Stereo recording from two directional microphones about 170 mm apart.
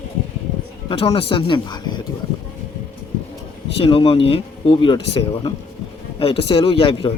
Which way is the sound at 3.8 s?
35° left (ahead or behind).